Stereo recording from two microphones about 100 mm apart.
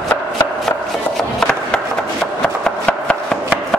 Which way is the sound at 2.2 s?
5° left (ahead or behind).